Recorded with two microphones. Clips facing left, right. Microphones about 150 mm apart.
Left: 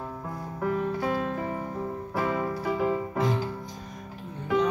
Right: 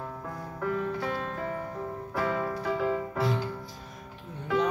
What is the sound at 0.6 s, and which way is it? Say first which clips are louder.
Music: left 3 dB; 15° left (ahead or behind).